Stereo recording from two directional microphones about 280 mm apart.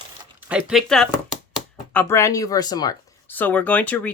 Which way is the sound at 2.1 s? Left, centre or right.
Centre.